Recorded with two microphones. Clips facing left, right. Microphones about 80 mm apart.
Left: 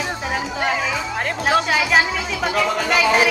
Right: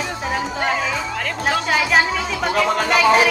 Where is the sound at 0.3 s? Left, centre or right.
Centre.